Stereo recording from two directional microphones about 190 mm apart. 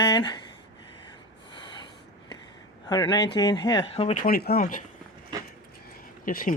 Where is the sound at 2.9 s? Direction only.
20° left (ahead or behind).